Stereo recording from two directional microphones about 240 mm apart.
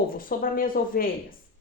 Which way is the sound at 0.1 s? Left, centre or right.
Left.